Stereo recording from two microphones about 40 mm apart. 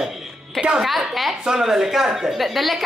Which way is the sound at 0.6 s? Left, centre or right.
Right.